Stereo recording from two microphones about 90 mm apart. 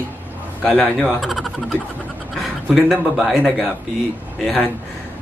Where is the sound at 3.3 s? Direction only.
15° right (ahead or behind).